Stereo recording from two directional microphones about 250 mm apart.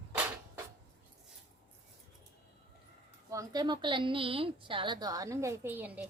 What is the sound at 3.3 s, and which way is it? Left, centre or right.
A woman's voice, centre.